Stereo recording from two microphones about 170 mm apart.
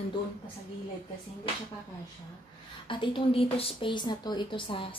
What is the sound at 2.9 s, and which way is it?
A woman's voice, 30° left (ahead or behind).